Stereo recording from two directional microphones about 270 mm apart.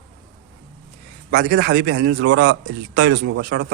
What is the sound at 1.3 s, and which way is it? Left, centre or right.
A man's voice, right.